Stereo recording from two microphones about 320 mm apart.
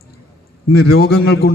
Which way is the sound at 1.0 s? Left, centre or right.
Left.